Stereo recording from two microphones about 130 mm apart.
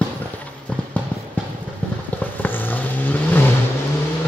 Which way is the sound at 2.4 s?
15° left (ahead or behind).